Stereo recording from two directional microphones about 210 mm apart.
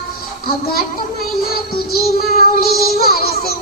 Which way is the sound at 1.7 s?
45° left (ahead or behind).